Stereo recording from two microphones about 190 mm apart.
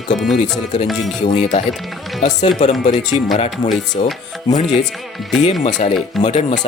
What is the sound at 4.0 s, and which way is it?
Speech, 30° left (ahead or behind).